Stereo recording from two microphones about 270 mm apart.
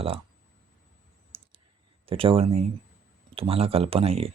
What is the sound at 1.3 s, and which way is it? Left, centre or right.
Clicking, centre.